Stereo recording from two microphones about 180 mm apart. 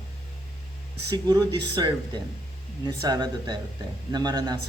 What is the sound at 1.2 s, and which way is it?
A man's voice, 25° right (ahead or behind).